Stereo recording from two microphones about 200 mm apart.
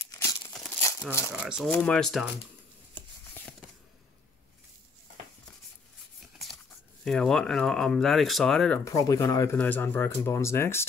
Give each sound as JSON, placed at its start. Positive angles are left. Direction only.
{"t": 0.1, "sound": "crumpling", "side_deg": 20}
{"t": 0.5, "sound": "crumpling", "side_deg": 5}
{"t": 1.3, "sound": "speech", "side_deg": -5}
{"t": 2.9, "sound": "a sound", "side_deg": 10}
{"t": 7.1, "sound": "speech", "side_deg": 0}